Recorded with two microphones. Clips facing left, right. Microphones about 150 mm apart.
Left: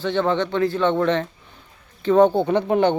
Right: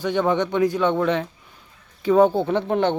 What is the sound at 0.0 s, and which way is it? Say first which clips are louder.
Speech: even; 15° right (ahead or behind).